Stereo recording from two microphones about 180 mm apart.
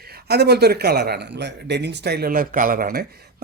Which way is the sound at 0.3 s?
65° right (ahead or behind).